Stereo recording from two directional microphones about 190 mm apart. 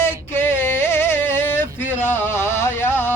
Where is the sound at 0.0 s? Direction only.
10° left (ahead or behind).